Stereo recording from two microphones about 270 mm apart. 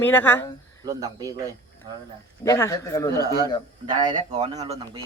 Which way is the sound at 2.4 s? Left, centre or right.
Centre.